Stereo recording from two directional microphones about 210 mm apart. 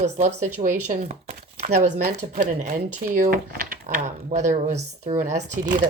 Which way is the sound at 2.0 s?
45° right (ahead or behind).